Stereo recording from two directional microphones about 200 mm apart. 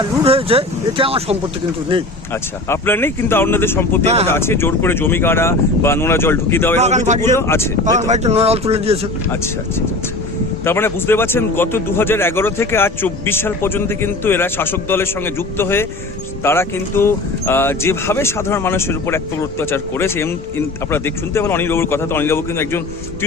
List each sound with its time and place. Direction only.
0.3 s speech: 30° right (ahead or behind)
2.6 s speech: 10° left (ahead or behind)
4.0 s a man's voice: 30° right (ahead or behind)
4.3 s speech: 10° left (ahead or behind)
6.7 s a man's voice: 35° right (ahead or behind)
7.3 s speech: 15° left (ahead or behind)
7.9 s a man's voice: 35° right (ahead or behind)
9.3 s speech: 10° left (ahead or behind)